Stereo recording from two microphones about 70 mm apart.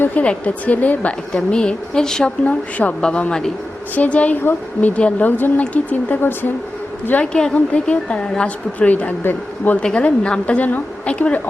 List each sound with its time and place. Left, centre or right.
0.0 s a woman's voice: left
2.4 s a woman's voice: centre